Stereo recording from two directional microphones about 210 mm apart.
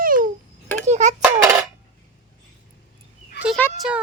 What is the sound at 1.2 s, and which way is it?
Speech, 15° right (ahead or behind).